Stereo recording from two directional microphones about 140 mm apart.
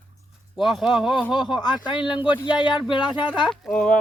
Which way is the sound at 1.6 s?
35° left (ahead or behind).